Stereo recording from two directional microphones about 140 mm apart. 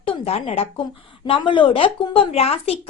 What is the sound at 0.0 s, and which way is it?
A woman's voice, 45° left (ahead or behind).